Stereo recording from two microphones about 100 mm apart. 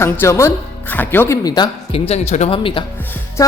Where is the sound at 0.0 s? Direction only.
25° left (ahead or behind).